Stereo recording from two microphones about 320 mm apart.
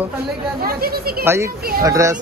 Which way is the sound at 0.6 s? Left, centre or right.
Right.